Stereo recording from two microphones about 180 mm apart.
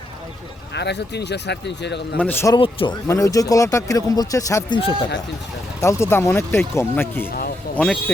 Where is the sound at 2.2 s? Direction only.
10° left (ahead or behind).